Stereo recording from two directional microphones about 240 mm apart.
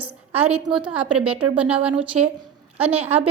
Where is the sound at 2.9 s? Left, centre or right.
Right.